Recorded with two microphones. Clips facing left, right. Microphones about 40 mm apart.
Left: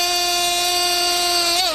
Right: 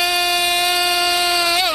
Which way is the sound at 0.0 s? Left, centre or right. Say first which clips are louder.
Right 3 dB; centre.